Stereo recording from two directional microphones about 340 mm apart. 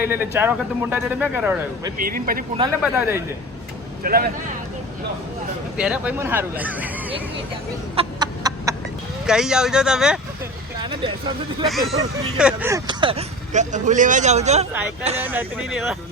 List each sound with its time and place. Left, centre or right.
0.0 s speech: centre
2.0 s speech: right
2.6 s speech: centre
4.0 s speech: right
5.7 s speech: centre
7.9 s chicken: centre
9.2 s speech: centre
11.7 s speech: centre
15.2 s speech: centre